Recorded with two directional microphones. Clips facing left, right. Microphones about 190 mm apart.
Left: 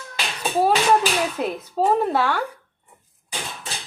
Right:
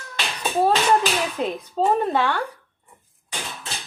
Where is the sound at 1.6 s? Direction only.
10° left (ahead or behind).